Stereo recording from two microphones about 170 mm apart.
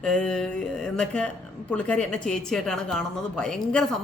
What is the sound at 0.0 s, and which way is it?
A woman's voice, 5° left (ahead or behind).